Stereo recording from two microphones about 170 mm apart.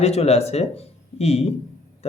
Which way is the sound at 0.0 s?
35° left (ahead or behind).